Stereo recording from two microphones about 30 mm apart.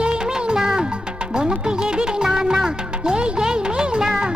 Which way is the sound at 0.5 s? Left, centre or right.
Centre.